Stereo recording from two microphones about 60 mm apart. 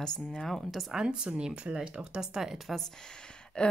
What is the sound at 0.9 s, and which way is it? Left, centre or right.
Speech, centre.